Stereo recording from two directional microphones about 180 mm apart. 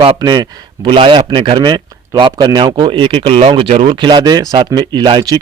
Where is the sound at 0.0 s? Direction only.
25° right (ahead or behind).